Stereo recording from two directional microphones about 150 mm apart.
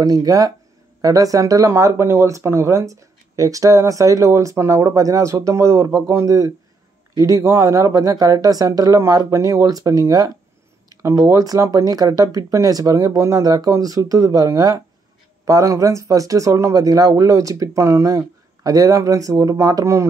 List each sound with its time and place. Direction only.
0.0 s speech: 25° right (ahead or behind)